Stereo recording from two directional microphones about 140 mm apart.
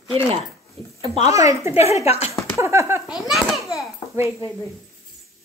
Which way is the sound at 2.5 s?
20° right (ahead or behind).